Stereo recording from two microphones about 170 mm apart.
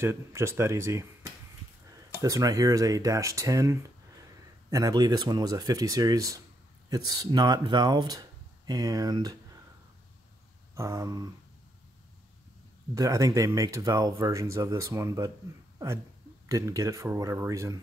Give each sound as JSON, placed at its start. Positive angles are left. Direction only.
{"t": 0.0, "sound": "speech", "side_deg": -15}
{"t": 10.7, "sound": "a sound", "side_deg": -20}
{"t": 12.9, "sound": "speech", "side_deg": -20}
{"t": 16.4, "sound": "speech", "side_deg": -20}